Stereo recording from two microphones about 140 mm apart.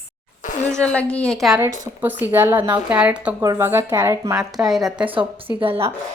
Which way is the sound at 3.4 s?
20° right (ahead or behind).